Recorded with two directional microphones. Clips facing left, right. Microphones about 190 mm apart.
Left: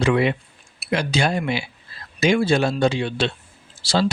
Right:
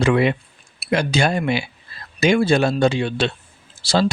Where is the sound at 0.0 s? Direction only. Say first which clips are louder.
Right 2 dB; 55° right (ahead or behind).